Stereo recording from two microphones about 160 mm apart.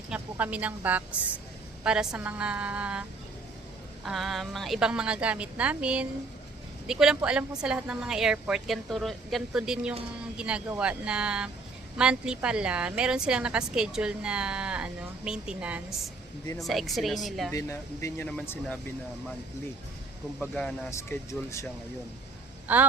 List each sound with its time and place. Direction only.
0.1 s a woman's voice: 10° right (ahead or behind)
4.0 s a woman's voice: centre (ahead or behind)
17.5 s speech: 20° left (ahead or behind)
20.5 s a woman's voice: 5° left (ahead or behind)
20.9 s speech: 20° left (ahead or behind)
22.6 s speech: 10° right (ahead or behind)